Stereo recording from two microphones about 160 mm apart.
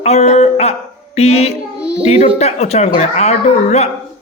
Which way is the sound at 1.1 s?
40° left (ahead or behind).